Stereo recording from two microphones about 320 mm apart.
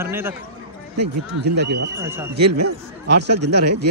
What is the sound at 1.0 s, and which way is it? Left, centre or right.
Speech, right.